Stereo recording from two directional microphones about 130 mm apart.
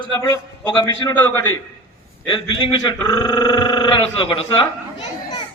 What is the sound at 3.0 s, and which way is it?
Speech, 30° left (ahead or behind).